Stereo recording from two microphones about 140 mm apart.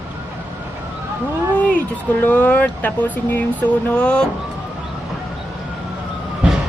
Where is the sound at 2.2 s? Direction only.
10° left (ahead or behind).